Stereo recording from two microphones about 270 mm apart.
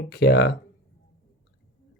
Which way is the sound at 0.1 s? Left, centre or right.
Left.